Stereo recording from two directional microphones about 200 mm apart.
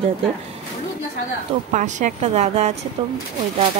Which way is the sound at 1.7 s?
40° right (ahead or behind).